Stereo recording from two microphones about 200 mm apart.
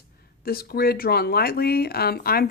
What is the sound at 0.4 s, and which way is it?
Speech, 50° left (ahead or behind).